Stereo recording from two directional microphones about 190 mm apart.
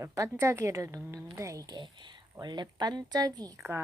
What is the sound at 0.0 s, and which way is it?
A woman's voice, 15° right (ahead or behind).